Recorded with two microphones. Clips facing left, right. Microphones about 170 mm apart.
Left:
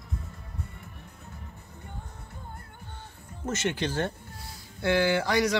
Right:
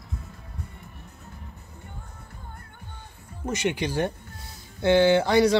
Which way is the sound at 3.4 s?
15° right (ahead or behind).